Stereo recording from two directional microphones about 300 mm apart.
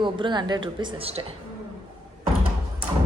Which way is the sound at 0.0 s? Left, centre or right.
Centre.